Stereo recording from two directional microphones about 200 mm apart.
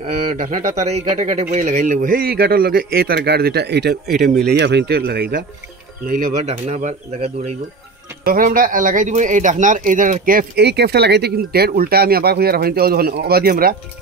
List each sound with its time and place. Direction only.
0.0 s speech: 40° right (ahead or behind)
4.1 s speech: centre (ahead or behind)
4.5 s speech: 55° right (ahead or behind)
6.0 s speech: 40° right (ahead or behind)
8.3 s speech: 45° right (ahead or behind)